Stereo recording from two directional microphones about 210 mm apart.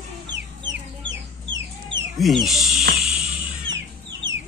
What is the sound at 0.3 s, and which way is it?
Chicken, 60° right (ahead or behind).